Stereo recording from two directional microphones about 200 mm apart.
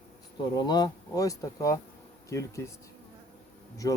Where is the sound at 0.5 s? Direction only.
20° left (ahead or behind).